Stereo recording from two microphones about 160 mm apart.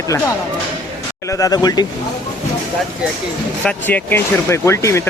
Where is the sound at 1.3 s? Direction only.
20° left (ahead or behind).